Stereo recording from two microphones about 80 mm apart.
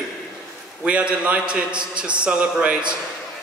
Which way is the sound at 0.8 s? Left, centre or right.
Centre.